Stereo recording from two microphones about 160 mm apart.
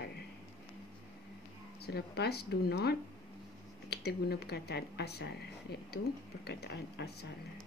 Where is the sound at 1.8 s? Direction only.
90° left.